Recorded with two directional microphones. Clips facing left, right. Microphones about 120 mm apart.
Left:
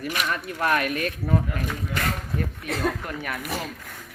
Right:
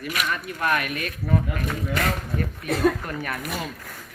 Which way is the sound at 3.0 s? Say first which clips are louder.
Right 1 dB; 10° left (ahead or behind).